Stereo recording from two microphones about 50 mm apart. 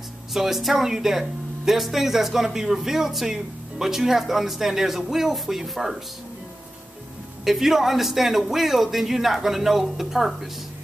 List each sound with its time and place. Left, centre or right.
0.3 s a man's voice: centre
7.4 s a man's voice: centre